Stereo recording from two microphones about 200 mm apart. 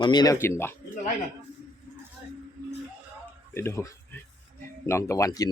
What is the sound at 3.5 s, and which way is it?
Speech, 15° left (ahead or behind).